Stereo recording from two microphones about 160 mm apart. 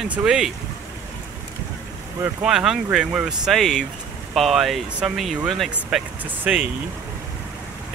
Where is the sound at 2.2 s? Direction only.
5° right (ahead or behind).